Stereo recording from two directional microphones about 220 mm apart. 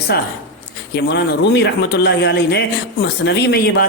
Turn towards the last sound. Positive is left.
turn(degrees=45)  # may be behind; listen again after turning